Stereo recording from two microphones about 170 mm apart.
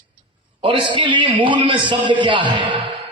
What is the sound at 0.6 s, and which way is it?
A man's voice, 30° right (ahead or behind).